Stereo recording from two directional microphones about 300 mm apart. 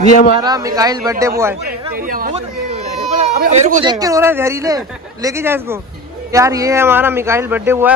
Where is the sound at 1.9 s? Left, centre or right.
Right.